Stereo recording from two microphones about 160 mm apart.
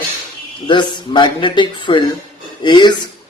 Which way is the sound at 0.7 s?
30° left (ahead or behind).